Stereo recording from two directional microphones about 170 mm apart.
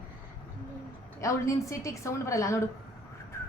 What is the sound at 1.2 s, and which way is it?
A woman's voice, 20° left (ahead or behind).